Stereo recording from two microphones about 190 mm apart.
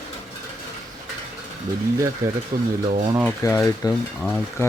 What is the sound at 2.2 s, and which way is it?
Speech, 15° right (ahead or behind).